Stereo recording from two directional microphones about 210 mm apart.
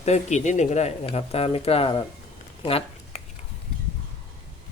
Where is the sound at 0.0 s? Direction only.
35° left (ahead or behind).